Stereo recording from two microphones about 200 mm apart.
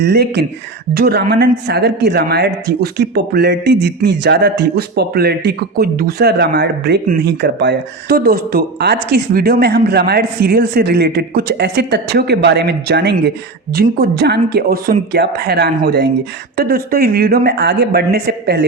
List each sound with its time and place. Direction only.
0.0 s speech: 55° right (ahead or behind)